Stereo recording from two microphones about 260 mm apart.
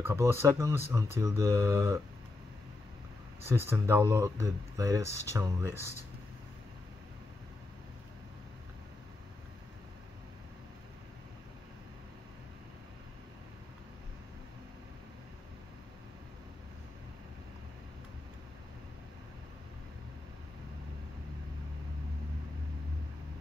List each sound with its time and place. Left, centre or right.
0.0 s speech: centre
3.4 s speech: centre